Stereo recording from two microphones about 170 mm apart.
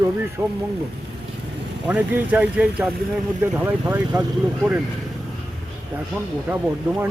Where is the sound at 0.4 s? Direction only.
15° right (ahead or behind).